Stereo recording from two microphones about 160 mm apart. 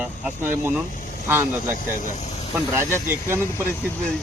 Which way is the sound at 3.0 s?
15° right (ahead or behind).